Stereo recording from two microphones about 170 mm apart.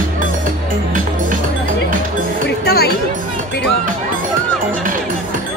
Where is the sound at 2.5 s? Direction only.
70° left (ahead or behind).